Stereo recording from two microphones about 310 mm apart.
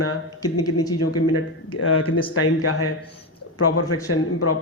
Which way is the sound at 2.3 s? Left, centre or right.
Left.